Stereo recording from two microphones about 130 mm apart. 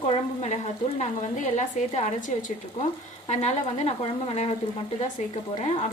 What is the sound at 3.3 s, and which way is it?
A woman's voice, 60° left (ahead or behind).